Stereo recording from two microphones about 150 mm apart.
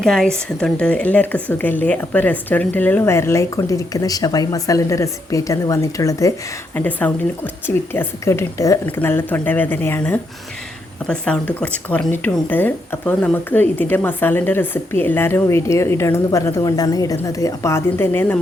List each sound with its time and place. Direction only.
0.0 s speech: 5° left (ahead or behind)